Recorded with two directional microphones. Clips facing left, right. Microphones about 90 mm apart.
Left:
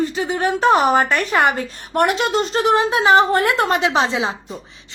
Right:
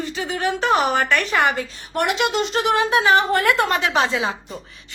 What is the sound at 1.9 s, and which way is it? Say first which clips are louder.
A woman's voice: left 3 dB; 45° left (ahead or behind).